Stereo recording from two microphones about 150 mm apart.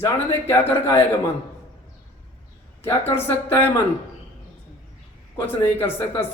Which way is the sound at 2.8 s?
15° left (ahead or behind).